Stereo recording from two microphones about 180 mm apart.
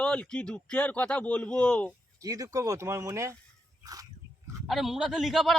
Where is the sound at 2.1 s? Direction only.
20° right (ahead or behind).